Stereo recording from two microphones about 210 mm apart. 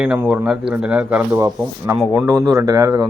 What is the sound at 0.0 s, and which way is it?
Speech, 5° right (ahead or behind).